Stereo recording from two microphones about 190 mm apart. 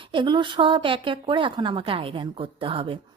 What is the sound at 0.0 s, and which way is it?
A woman's voice, 25° right (ahead or behind).